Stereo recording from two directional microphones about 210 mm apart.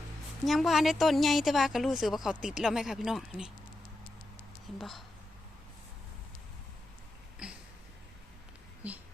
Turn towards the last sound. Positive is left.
turn(degrees=-5)  # may be behind; listen again after turning